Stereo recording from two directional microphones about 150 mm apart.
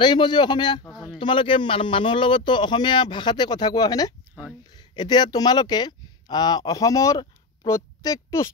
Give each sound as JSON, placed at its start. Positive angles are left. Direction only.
{"t": 0.0, "sound": "speech", "side_deg": 30}
{"t": 0.8, "sound": "a sound", "side_deg": 0}
{"t": 1.2, "sound": "speech", "side_deg": 35}